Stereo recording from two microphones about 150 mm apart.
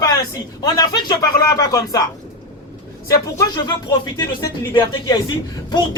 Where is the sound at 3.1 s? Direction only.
25° left (ahead or behind).